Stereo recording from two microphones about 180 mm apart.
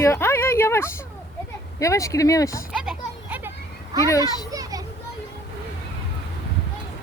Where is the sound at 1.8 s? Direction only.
15° left (ahead or behind).